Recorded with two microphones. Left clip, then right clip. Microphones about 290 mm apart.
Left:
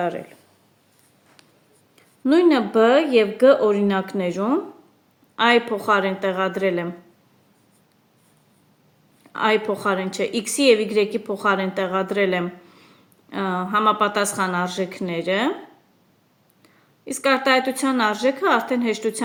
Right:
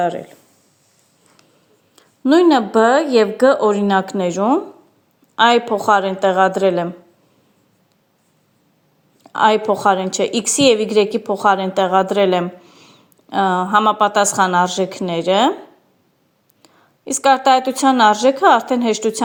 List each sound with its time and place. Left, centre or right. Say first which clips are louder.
0.0 s a woman's voice: right 6 dB; centre
2.0 s a woman's voice: right 5 dB; centre
9.2 s a woman's voice: right 6 dB; centre
16.6 s a woman's voice: right 6 dB; centre